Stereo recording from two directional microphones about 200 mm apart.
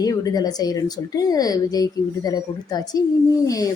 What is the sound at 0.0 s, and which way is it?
A woman's voice, 20° left (ahead or behind).